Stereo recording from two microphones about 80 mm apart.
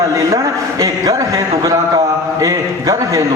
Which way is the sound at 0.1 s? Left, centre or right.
Right.